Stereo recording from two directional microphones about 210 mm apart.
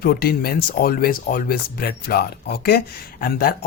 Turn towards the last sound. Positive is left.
turn(degrees=45)  # may be behind; listen again after turning